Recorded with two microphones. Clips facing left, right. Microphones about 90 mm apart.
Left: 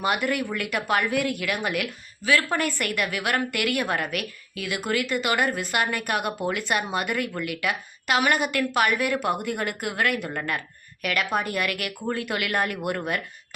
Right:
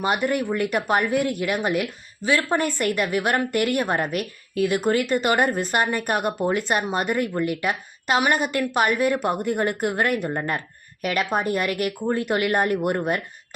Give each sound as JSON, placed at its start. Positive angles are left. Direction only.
{"t": 0.0, "sound": "a woman's voice", "side_deg": -25}